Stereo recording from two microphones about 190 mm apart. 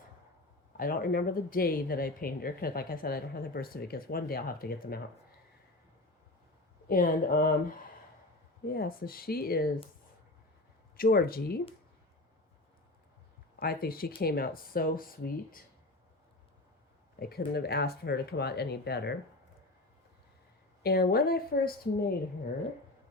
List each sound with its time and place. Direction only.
0.8 s speech: 50° left (ahead or behind)
6.8 s speech: 50° left (ahead or behind)
10.9 s speech: 50° left (ahead or behind)
13.6 s speech: 50° left (ahead or behind)
17.2 s speech: 55° left (ahead or behind)
20.8 s speech: 55° left (ahead or behind)